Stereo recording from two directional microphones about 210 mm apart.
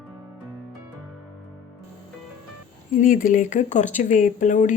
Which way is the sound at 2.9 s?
40° left (ahead or behind).